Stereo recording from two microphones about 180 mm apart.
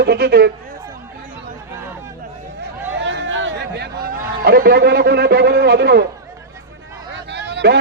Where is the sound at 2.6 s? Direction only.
75° right (ahead or behind).